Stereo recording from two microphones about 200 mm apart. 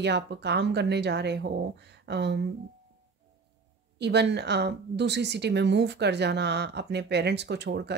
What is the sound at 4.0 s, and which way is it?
A woman's voice, 60° right (ahead or behind).